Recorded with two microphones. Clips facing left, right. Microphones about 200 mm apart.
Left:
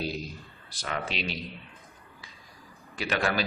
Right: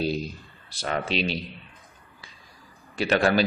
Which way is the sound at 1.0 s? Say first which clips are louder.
Right 7 dB; 25° right (ahead or behind).